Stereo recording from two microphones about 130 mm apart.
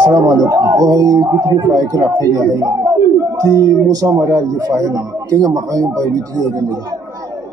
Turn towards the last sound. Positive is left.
turn(degrees=-25)  # may be behind; listen again after turning